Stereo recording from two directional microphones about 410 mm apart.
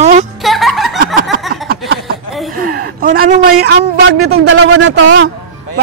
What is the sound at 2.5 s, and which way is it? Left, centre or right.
Gasp, right.